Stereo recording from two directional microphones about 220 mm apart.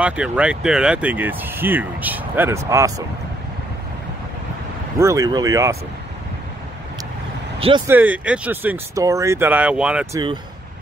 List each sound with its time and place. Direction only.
0.0 s speech: 5° right (ahead or behind)
4.9 s speech: 15° right (ahead or behind)
7.6 s speech: 20° right (ahead or behind)
7.9 s speech: 5° right (ahead or behind)